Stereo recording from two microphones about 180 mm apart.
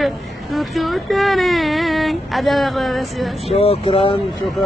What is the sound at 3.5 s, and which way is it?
Speech, 35° left (ahead or behind).